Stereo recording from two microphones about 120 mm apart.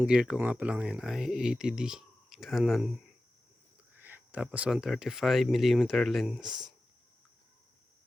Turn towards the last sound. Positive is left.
turn(degrees=-5)  # may be behind; listen again after turning